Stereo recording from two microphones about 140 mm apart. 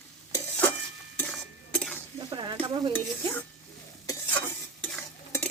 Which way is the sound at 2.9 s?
15° left (ahead or behind).